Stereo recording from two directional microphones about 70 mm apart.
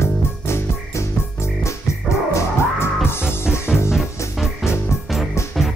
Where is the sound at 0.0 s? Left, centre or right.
Left.